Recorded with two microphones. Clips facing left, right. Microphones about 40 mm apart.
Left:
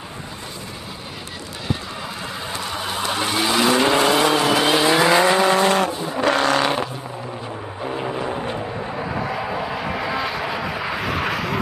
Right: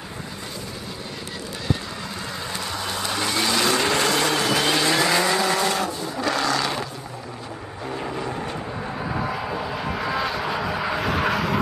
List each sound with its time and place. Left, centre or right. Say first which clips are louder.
1.7 s vehicle: left 1 dB; centre
5.1 s vehicle: left 5 dB; left
8.0 s vehicle: left 3 dB; left
9.0 s vehicle: left 1 dB; centre